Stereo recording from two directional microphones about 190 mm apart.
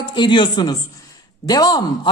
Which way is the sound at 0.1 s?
25° left (ahead or behind).